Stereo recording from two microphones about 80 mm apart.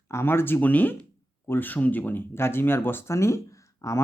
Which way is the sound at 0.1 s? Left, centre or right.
Left.